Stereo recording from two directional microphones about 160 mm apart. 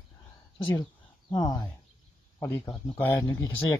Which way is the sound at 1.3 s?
25° left (ahead or behind).